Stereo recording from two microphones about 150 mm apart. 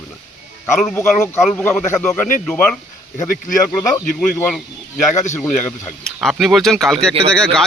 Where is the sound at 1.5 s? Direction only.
15° left (ahead or behind).